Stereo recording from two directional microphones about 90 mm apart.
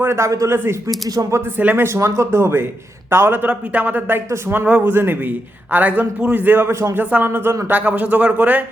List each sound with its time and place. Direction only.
0.0 s a man's voice: 30° right (ahead or behind)
1.0 s speech: 40° right (ahead or behind)
1.5 s a man's voice: 20° right (ahead or behind)
7.0 s a man's voice: 20° right (ahead or behind)